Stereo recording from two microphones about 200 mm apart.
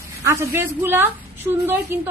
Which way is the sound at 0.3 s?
15° right (ahead or behind).